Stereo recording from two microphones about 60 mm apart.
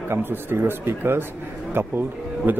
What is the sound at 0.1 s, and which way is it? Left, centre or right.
Speech, right.